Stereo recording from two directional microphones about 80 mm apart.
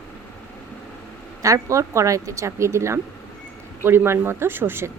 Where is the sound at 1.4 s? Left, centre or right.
Right.